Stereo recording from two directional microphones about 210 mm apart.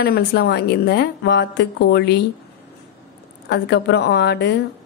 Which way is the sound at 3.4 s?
55° left (ahead or behind).